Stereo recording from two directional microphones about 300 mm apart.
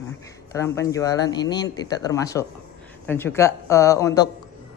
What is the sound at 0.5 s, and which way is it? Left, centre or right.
Speech, centre.